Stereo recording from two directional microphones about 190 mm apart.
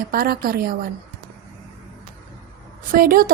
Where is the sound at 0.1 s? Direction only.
50° right (ahead or behind).